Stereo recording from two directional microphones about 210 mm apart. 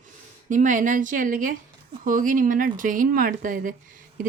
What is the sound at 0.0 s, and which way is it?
Speech, 40° right (ahead or behind).